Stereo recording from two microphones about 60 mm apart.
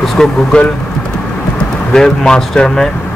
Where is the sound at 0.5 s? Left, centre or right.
Centre.